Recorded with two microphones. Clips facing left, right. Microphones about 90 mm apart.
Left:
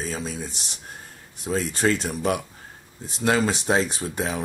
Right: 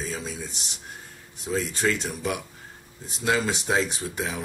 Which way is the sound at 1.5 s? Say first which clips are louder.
Left 3 dB; 35° left (ahead or behind).